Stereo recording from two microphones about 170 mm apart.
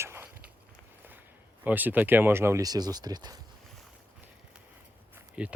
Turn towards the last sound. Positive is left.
turn(degrees=-10)  # may be behind; listen again after turning